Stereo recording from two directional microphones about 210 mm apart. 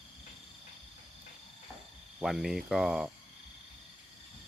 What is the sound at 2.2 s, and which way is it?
Speech, centre (ahead or behind).